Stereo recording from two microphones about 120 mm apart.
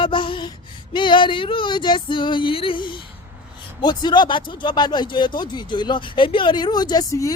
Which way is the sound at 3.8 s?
35° left (ahead or behind).